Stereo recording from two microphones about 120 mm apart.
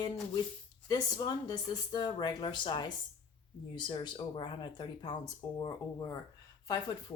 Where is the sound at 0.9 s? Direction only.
35° left (ahead or behind).